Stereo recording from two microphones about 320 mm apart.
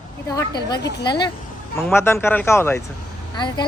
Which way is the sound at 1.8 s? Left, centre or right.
Centre.